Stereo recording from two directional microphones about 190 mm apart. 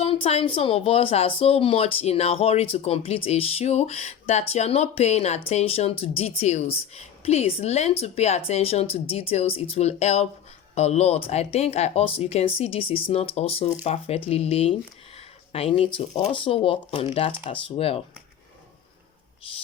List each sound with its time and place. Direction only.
0.0 s a woman's voice: 30° left (ahead or behind)